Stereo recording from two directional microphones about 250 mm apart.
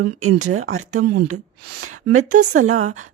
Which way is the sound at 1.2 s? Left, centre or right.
Right.